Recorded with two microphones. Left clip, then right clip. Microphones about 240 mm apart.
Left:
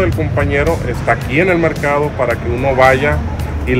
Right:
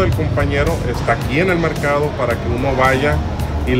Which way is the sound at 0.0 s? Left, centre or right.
Centre.